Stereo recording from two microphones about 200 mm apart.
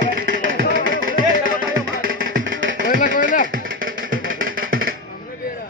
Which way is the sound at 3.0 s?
40° left (ahead or behind).